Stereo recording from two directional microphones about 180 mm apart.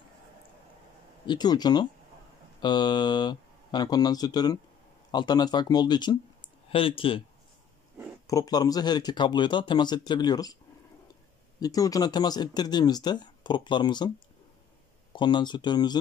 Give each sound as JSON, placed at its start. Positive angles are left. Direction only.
{"t": 1.2, "sound": "speech", "side_deg": 25}
{"t": 8.3, "sound": "speech", "side_deg": 20}
{"t": 11.6, "sound": "speech", "side_deg": 20}
{"t": 15.1, "sound": "speech", "side_deg": 25}